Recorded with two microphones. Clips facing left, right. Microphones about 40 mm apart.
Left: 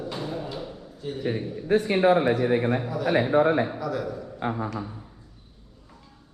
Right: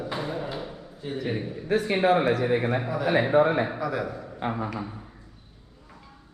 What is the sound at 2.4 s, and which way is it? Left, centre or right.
A man's voice, centre.